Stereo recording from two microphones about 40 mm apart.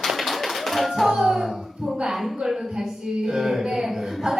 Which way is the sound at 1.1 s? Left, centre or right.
Centre.